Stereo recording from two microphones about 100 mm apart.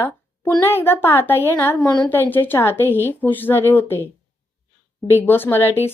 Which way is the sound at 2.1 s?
20° left (ahead or behind).